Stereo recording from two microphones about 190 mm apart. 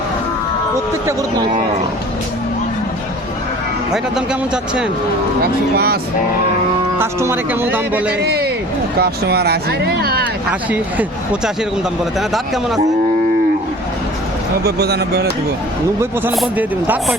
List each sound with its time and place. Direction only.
3.9 s a man's voice: 5° right (ahead or behind)
5.4 s speech: 55° right (ahead or behind)
7.0 s speech: 10° right (ahead or behind)
8.2 s a man's voice: 55° right (ahead or behind)
14.6 s speech: 55° right (ahead or behind)
16.3 s a man's voice: centre (ahead or behind)